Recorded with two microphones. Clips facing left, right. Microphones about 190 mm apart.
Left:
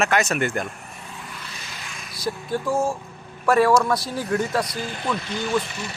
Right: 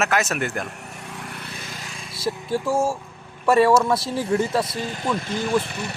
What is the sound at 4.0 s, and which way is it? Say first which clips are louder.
Speech: right 2 dB; 25° right (ahead or behind).